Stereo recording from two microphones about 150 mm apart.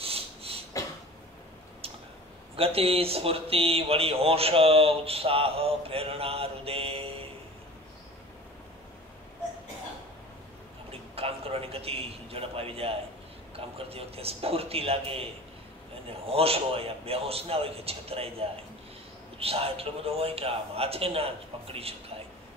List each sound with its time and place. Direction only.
0.0 s beatboxing: 40° right (ahead or behind)
2.5 s speech: 40° right (ahead or behind)
10.9 s a sound: 40° right (ahead or behind)
13.6 s speech: 40° right (ahead or behind)